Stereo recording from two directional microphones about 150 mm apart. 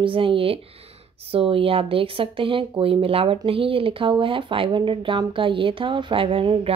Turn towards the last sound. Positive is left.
turn(degrees=-35)  # may be behind; listen again after turning